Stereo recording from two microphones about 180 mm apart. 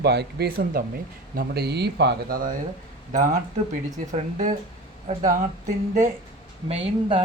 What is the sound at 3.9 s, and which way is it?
Speech, 45° right (ahead or behind).